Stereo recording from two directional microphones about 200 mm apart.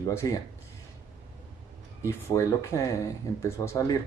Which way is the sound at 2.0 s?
15° left (ahead or behind).